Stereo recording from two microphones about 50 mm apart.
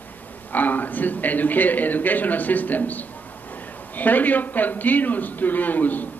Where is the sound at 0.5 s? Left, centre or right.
Left.